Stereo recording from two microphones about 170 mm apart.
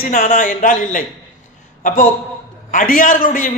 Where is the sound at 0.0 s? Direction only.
50° left (ahead or behind).